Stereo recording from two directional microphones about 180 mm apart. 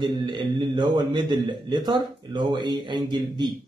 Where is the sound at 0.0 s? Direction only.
25° right (ahead or behind).